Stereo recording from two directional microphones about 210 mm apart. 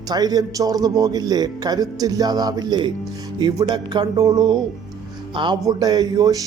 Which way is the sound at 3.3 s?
20° right (ahead or behind).